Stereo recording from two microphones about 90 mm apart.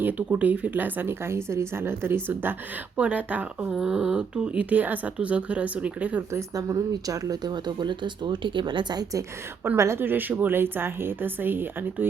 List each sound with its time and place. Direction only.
0.0 s speech: 20° right (ahead or behind)
3.8 s speech: 5° right (ahead or behind)
6.5 s speech: 45° right (ahead or behind)
9.7 s speech: 30° right (ahead or behind)